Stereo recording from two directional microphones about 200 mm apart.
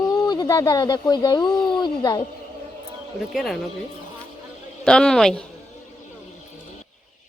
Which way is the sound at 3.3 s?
Centre (ahead or behind).